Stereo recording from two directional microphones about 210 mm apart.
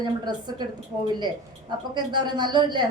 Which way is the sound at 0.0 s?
20° right (ahead or behind).